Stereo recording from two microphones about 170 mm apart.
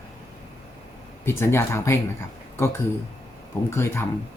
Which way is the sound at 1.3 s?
15° left (ahead or behind).